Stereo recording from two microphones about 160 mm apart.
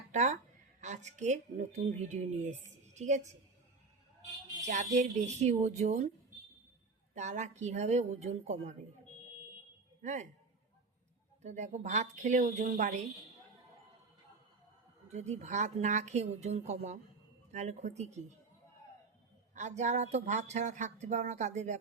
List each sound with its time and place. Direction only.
0.1 s speech: 50° right (ahead or behind)
4.6 s speech: 45° right (ahead or behind)
7.1 s speech: 50° right (ahead or behind)
10.0 s a man's voice: 50° right (ahead or behind)
11.4 s speech: 45° right (ahead or behind)
15.1 s speech: 45° right (ahead or behind)
19.5 s speech: 45° right (ahead or behind)